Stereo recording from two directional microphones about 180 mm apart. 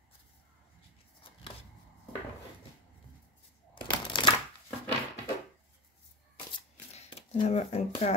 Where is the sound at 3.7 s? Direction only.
25° left (ahead or behind).